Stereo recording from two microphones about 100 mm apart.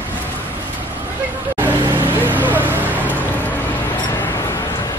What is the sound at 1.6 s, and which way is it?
Vehicle, 20° right (ahead or behind).